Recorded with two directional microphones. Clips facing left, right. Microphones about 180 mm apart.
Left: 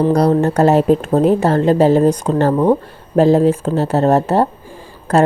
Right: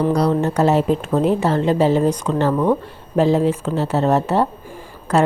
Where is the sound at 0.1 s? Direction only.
45° left (ahead or behind).